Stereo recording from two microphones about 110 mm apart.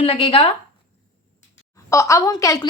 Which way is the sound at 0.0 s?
60° left (ahead or behind).